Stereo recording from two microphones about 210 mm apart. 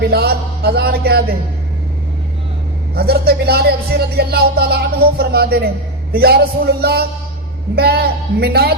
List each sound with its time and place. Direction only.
0.0 s speech: 45° right (ahead or behind)
2.9 s speech: 50° right (ahead or behind)